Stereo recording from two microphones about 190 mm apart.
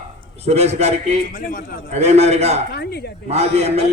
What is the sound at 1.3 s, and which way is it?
Speech, 45° left (ahead or behind).